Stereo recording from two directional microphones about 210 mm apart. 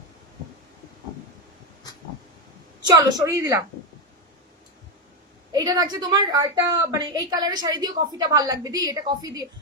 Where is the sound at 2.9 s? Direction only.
20° right (ahead or behind).